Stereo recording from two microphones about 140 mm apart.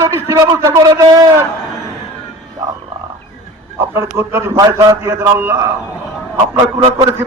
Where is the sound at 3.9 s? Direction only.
20° right (ahead or behind).